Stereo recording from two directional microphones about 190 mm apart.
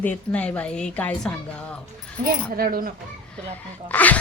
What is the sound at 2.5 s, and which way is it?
Coin, 50° right (ahead or behind).